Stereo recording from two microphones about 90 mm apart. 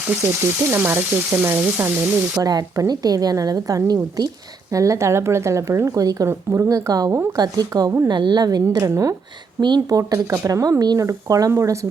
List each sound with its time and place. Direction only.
0.7 s frying: 25° right (ahead or behind)
2.3 s a woman's voice: 45° right (ahead or behind)
6.2 s frying: 30° right (ahead or behind)
6.7 s a woman's voice: 40° right (ahead or behind)
8.1 s a woman's voice: 55° right (ahead or behind)
8.6 s speech: 35° right (ahead or behind)
9.6 s speech: 55° right (ahead or behind)
10.0 s speech: 30° right (ahead or behind)